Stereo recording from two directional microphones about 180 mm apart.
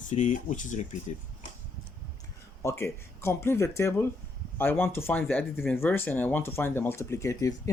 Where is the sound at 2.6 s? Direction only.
15° left (ahead or behind).